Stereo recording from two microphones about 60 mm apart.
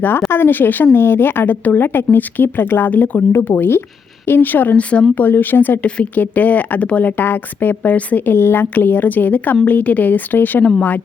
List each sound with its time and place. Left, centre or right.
0.3 s a woman's voice: left
5.1 s a woman's voice: left
7.2 s a woman's voice: left